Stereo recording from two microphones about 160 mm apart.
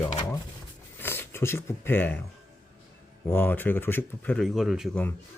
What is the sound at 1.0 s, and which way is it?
Speech, 15° left (ahead or behind).